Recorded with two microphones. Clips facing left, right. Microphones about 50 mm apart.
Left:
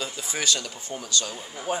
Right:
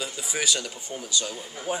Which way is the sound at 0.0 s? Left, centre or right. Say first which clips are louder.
Even; centre.